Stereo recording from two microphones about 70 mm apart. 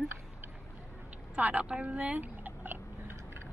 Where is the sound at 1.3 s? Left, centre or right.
Centre.